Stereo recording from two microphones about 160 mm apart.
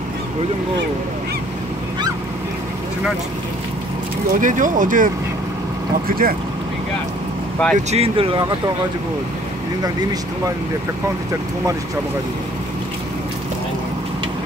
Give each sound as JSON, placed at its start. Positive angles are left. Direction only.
{"t": 4.4, "sound": "speech", "side_deg": -55}
{"t": 7.7, "sound": "speech", "side_deg": -40}